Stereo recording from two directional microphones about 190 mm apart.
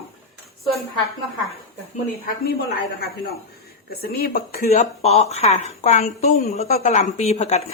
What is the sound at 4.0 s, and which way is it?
Speech, 55° left (ahead or behind).